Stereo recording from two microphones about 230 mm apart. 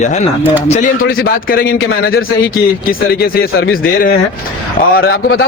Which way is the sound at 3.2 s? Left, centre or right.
Left.